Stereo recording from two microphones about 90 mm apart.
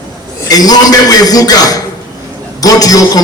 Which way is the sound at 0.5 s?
45° left (ahead or behind).